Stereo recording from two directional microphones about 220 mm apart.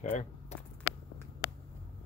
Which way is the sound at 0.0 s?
35° left (ahead or behind).